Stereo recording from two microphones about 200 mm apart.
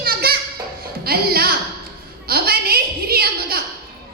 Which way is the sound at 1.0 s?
50° right (ahead or behind).